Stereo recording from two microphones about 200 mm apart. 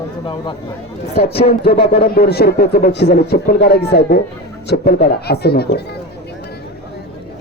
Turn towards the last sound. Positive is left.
turn(degrees=55)  # may be behind; listen again after turning